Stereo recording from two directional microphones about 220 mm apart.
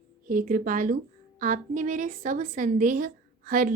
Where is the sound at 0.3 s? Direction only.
40° right (ahead or behind).